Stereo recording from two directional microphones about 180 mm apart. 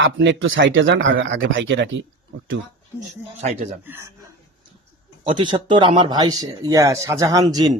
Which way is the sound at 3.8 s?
15° right (ahead or behind).